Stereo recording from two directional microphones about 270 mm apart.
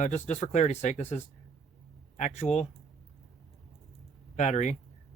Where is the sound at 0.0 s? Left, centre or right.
Left.